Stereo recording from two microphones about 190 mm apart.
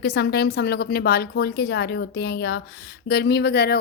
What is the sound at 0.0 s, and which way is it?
Speech, 60° left (ahead or behind).